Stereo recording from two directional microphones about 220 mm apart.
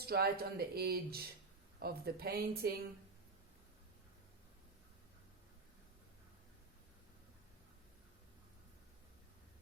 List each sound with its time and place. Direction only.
0.0 s speech: 45° right (ahead or behind)